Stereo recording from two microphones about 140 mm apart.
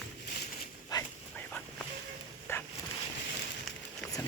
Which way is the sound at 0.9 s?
25° left (ahead or behind).